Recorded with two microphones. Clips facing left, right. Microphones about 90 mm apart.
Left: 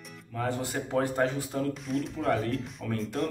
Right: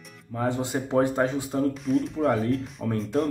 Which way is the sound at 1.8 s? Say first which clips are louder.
Right 6 dB; centre (ahead or behind).